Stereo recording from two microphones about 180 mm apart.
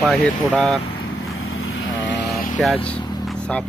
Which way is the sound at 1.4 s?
90° left.